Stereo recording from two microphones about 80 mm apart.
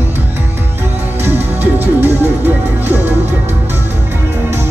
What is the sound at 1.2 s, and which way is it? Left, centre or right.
Music, right.